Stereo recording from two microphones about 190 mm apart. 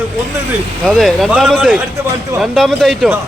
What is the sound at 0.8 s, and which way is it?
Speech, centre (ahead or behind).